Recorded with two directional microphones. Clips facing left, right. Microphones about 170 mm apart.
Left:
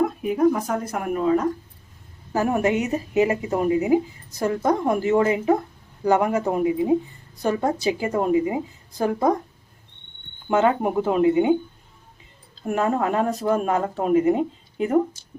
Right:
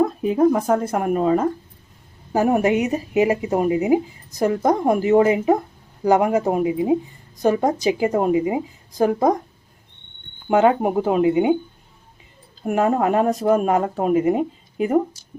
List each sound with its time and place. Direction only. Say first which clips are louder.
0.2 s a woman's voice: right 3 dB; 30° right (ahead or behind)
10.5 s speech: right 3 dB; 20° right (ahead or behind)
12.6 s speech: right 4 dB; 15° right (ahead or behind)